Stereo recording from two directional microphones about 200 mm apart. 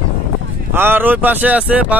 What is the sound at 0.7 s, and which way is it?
Speech, 10° right (ahead or behind).